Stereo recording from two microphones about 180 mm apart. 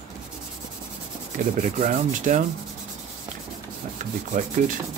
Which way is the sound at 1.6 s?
45° right (ahead or behind).